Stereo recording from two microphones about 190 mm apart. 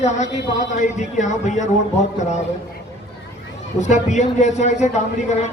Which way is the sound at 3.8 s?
40° left (ahead or behind).